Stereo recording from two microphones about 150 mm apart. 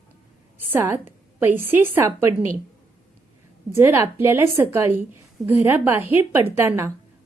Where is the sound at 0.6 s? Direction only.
15° right (ahead or behind).